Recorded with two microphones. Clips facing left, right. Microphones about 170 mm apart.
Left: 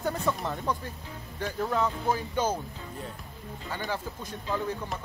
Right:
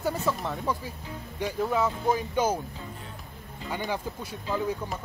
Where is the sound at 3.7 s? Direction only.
15° right (ahead or behind).